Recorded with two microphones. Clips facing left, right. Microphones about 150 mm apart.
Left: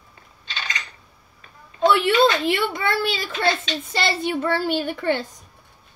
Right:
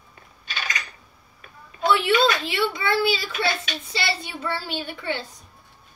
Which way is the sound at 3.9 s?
50° left (ahead or behind).